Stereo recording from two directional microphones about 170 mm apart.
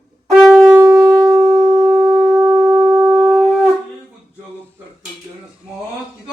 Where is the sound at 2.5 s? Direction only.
10° right (ahead or behind).